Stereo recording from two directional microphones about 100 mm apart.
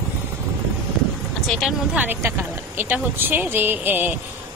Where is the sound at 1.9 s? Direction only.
20° right (ahead or behind).